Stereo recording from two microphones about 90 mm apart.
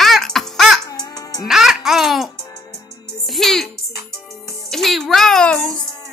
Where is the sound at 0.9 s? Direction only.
45° left (ahead or behind).